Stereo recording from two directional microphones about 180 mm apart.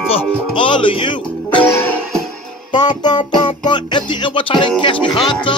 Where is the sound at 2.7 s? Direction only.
25° left (ahead or behind).